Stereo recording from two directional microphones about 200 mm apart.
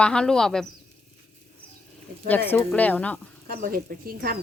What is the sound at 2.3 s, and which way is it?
Speech, 10° left (ahead or behind).